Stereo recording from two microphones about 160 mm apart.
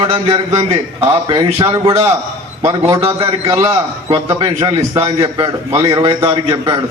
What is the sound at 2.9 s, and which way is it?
A man's voice, 15° right (ahead or behind).